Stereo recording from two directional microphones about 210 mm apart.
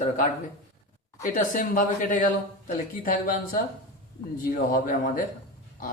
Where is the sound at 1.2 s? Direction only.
40° left (ahead or behind).